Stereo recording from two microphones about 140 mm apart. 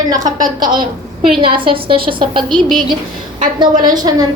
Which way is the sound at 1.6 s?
40° right (ahead or behind).